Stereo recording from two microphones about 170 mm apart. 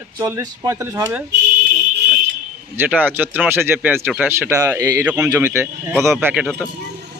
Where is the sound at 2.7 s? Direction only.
10° right (ahead or behind).